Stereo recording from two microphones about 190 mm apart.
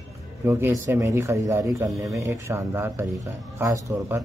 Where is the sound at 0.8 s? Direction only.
15° right (ahead or behind).